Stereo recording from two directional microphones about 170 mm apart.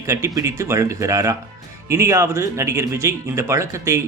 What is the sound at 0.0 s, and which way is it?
Speech, 15° right (ahead or behind).